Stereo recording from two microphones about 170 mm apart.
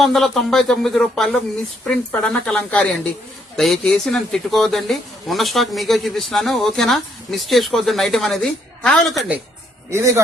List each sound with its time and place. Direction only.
0.0 s speech: centre (ahead or behind)
9.9 s a man's voice: 15° right (ahead or behind)